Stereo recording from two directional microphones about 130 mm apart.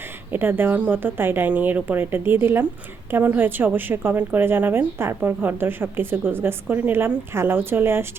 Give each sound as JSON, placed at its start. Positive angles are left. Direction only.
{"t": 0.3, "sound": "a woman's voice", "side_deg": -15}